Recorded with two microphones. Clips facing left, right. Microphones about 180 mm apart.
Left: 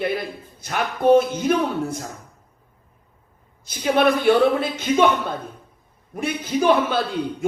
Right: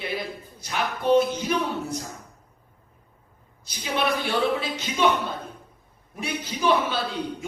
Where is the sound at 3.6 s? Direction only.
50° left (ahead or behind).